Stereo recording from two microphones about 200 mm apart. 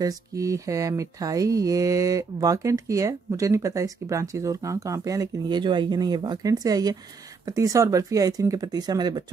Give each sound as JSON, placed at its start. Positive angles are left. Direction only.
{"t": 0.0, "sound": "mantra", "side_deg": -20}